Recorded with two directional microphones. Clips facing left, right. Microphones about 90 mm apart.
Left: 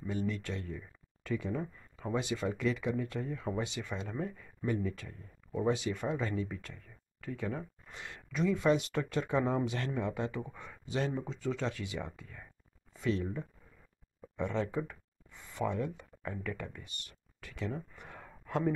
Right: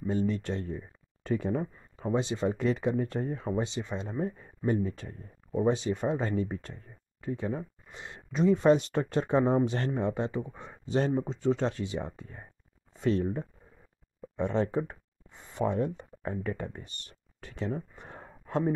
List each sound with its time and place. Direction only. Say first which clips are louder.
0.0 s speech: right 6 dB; 35° right (ahead or behind)
1.8 s speech: right 5 dB; 30° right (ahead or behind)
14.3 s speech: right 5 dB; 35° right (ahead or behind)